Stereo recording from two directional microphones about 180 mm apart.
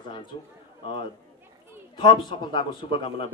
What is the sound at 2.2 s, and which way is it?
A man's voice, 25° left (ahead or behind).